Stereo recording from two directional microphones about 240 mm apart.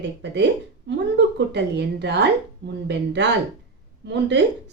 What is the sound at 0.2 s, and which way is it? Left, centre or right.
A woman's voice, right.